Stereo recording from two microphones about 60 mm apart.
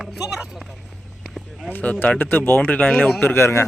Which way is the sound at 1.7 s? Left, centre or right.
Left.